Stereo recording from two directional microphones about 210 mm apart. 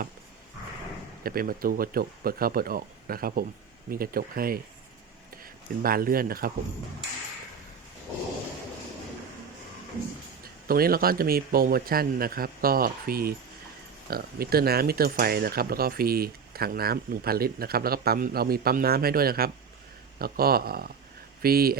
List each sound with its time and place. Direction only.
1.2 s speech: 45° right (ahead or behind)
5.8 s speech: 45° right (ahead or behind)
10.7 s speech: 45° right (ahead or behind)